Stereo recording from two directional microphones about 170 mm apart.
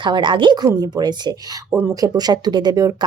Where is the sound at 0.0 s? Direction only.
25° right (ahead or behind).